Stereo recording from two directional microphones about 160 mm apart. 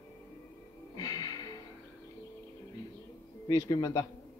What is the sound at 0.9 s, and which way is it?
Music, 25° left (ahead or behind).